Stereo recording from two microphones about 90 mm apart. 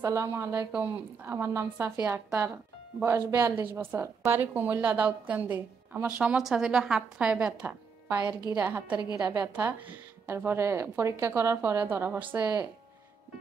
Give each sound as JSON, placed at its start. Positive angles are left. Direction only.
{"t": 0.0, "sound": "a woman's voice", "side_deg": -30}
{"t": 9.1, "sound": "a woman's voice", "side_deg": -45}
{"t": 9.4, "sound": "speech", "side_deg": -20}